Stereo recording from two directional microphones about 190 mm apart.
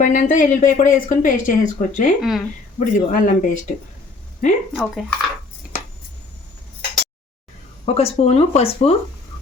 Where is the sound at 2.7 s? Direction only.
45° left (ahead or behind).